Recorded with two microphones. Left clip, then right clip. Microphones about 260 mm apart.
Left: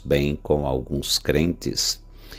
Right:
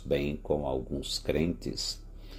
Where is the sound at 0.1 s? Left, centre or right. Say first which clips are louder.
Left 8 dB; left.